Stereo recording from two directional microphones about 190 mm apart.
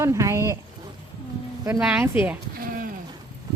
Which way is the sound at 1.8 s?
5° right (ahead or behind).